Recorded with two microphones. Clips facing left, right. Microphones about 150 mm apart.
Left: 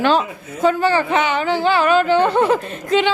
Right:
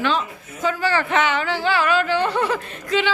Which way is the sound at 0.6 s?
20° left (ahead or behind).